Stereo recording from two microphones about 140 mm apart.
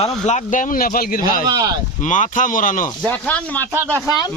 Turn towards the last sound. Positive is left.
turn(degrees=10)  # may be behind; listen again after turning